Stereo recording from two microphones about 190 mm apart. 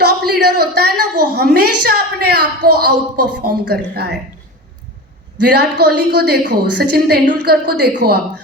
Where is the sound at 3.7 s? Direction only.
60° right (ahead or behind).